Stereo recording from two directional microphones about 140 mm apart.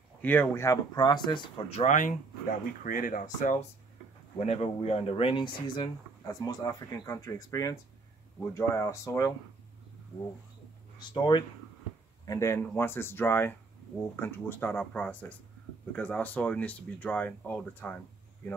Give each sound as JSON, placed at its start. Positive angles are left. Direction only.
{"t": 0.2, "sound": "speech", "side_deg": 10}
{"t": 0.9, "sound": "speech", "side_deg": 30}
{"t": 1.7, "sound": "speech", "side_deg": 50}
{"t": 2.0, "sound": "speech", "side_deg": 70}
{"t": 4.4, "sound": "speech", "side_deg": 50}
{"t": 11.0, "sound": "speech", "side_deg": 30}
{"t": 12.3, "sound": "speech", "side_deg": 20}